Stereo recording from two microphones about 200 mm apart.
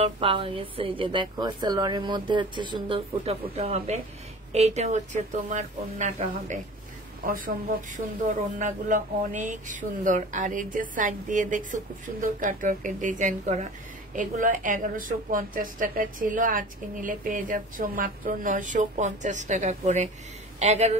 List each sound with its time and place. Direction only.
0.0 s a woman's voice: 25° right (ahead or behind)